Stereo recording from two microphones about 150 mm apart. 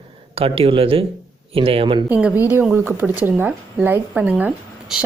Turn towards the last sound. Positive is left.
turn(degrees=-10)  # may be behind; listen again after turning